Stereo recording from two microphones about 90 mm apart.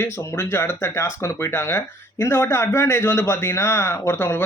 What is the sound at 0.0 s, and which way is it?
Speech, 30° left (ahead or behind).